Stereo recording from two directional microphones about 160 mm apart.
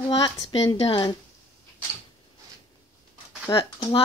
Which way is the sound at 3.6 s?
25° left (ahead or behind).